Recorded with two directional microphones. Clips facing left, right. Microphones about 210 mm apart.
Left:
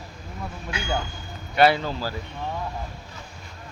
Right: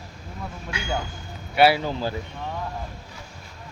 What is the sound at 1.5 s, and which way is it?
Speech, 10° right (ahead or behind).